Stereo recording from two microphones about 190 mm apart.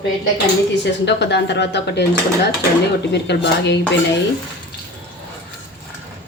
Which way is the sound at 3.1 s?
65° left (ahead or behind).